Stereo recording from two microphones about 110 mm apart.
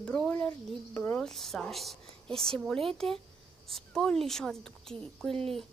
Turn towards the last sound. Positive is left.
turn(degrees=5)  # may be behind; listen again after turning